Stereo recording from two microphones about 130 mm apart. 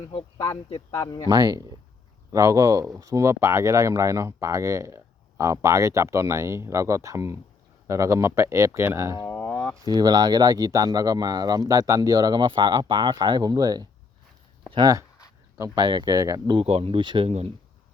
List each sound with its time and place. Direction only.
0.1 s speech: 35° left (ahead or behind)
1.3 s speech: 30° right (ahead or behind)
9.3 s a sound: 20° left (ahead or behind)
9.7 s speech: 30° right (ahead or behind)
16.5 s speech: 45° right (ahead or behind)